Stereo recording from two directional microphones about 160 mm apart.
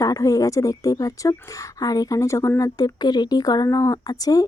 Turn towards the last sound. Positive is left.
turn(degrees=20)  # may be behind; listen again after turning